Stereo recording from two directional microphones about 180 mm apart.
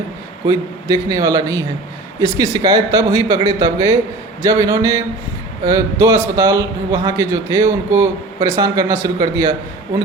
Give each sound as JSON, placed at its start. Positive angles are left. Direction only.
{"t": 0.4, "sound": "a man's voice", "side_deg": -20}